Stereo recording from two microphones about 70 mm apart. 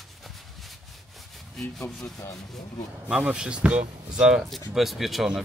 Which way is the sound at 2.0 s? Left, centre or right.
Left.